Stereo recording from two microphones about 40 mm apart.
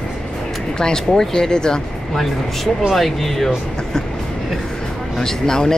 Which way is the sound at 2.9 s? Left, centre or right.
Centre.